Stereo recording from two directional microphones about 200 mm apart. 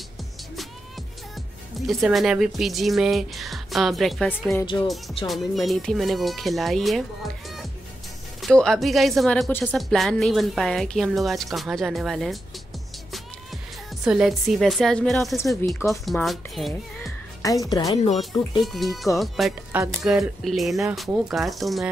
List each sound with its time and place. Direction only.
1.9 s speech: centre (ahead or behind)
8.4 s speech: centre (ahead or behind)
14.0 s speech: centre (ahead or behind)
17.4 s a woman's voice: 15° left (ahead or behind)
18.6 s speech: centre (ahead or behind)